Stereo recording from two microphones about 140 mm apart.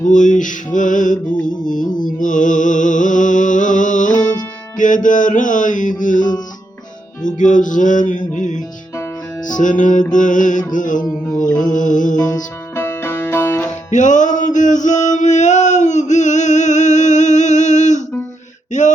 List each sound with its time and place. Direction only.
0.0 s music: 65° left (ahead or behind)
1.5 s mantra: 65° left (ahead or behind)
2.0 s music: 70° left (ahead or behind)
7.3 s music: 65° left (ahead or behind)
10.7 s mantra: 65° left (ahead or behind)
12.1 s music: 30° left (ahead or behind)
12.7 s music: 20° left (ahead or behind)
13.9 s music: 65° left (ahead or behind)
18.7 s a sound: 60° left (ahead or behind)